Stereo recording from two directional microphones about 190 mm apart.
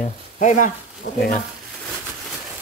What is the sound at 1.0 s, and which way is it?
Speech, 70° left (ahead or behind).